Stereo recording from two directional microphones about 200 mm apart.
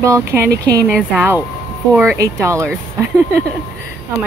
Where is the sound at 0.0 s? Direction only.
15° right (ahead or behind).